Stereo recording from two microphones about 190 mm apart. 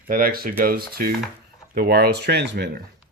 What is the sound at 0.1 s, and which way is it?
Speech, 50° right (ahead or behind).